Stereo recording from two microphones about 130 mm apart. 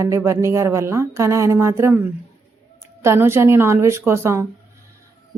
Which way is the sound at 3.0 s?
20° right (ahead or behind).